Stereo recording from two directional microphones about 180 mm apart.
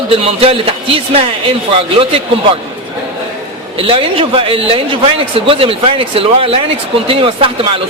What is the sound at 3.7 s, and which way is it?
A man's voice, 30° right (ahead or behind).